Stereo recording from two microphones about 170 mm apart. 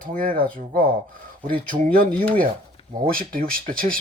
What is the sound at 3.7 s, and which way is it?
Speech, 55° right (ahead or behind).